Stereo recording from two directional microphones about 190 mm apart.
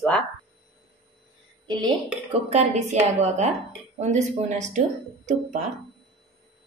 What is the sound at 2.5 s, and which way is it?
Speech, 35° right (ahead or behind).